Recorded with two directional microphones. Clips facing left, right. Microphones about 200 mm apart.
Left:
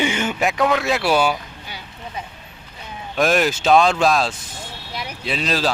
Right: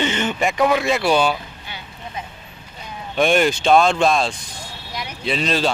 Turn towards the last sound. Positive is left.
turn(degrees=0)  # may be behind; listen again after turning